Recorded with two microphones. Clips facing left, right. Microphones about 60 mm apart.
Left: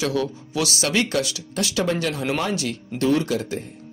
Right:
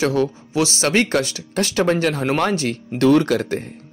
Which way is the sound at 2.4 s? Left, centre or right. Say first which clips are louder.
Right 5 dB; right.